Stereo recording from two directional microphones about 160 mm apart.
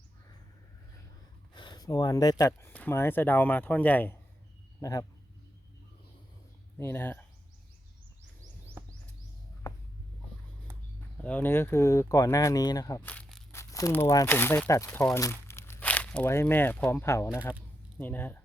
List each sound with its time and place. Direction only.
1.5 s a sound: 30° left (ahead or behind)
2.4 s speech: 15° left (ahead or behind)
4.8 s speech: 20° left (ahead or behind)
6.7 s speech: 15° left (ahead or behind)
9.7 s a sound: 20° left (ahead or behind)
11.2 s speech: 10° left (ahead or behind)
13.0 s speech: 10° left (ahead or behind)